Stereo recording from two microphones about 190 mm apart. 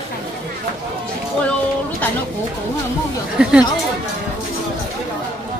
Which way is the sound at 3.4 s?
5° right (ahead or behind).